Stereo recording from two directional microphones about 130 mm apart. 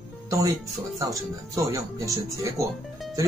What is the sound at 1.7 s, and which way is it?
Speech, 25° right (ahead or behind).